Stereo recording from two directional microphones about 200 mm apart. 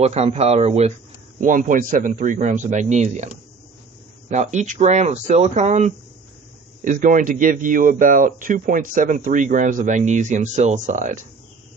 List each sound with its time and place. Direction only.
0.0 s speech: 30° right (ahead or behind)
4.3 s speech: 35° right (ahead or behind)